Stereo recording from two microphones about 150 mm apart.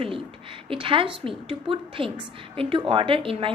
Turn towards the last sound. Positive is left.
turn(degrees=-35)  # may be behind; listen again after turning